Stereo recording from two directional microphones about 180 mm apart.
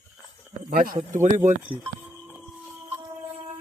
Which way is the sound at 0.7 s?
55° right (ahead or behind).